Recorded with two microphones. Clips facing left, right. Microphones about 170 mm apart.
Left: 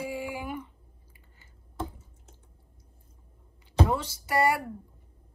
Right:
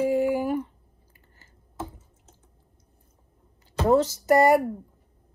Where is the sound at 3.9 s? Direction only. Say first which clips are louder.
Right 11 dB; 45° right (ahead or behind).